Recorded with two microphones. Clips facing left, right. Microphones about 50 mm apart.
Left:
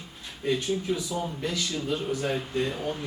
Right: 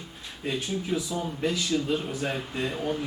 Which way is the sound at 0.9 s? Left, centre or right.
Centre.